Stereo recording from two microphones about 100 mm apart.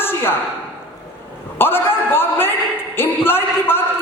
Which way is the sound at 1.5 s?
20° left (ahead or behind).